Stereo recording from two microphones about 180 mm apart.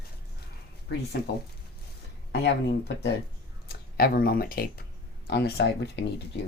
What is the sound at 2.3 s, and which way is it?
Speech, 65° left (ahead or behind).